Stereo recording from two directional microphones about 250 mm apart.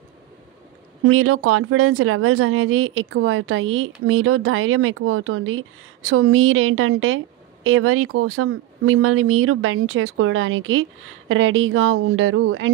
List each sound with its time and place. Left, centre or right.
1.0 s a woman's voice: right